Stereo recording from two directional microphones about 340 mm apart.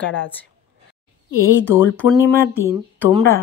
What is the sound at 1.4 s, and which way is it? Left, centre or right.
Speech, left.